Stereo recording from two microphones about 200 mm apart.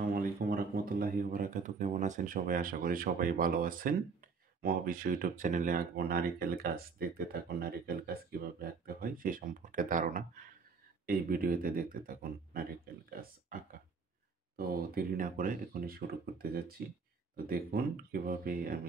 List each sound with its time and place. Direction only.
0.1 s speech: 45° right (ahead or behind)